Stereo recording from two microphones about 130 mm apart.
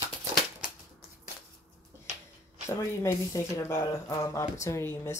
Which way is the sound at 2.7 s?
20° left (ahead or behind).